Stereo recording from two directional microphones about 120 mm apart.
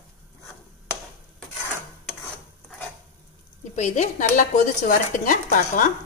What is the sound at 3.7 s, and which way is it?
A woman's voice, 80° left.